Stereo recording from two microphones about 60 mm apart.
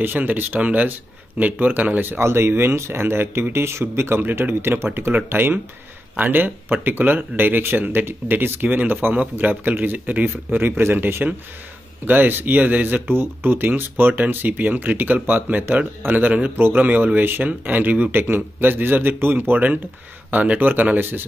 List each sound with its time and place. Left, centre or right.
0.0 s speech: right
2.2 s speech: right